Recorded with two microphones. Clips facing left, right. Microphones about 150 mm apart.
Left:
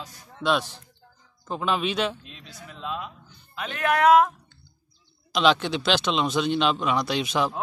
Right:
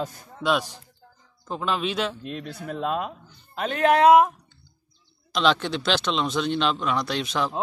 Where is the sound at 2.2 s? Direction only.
55° right (ahead or behind).